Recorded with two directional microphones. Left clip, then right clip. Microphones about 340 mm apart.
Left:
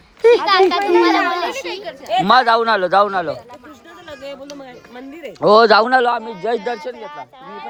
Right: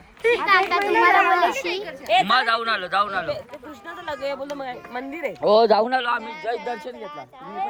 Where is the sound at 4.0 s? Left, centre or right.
Centre.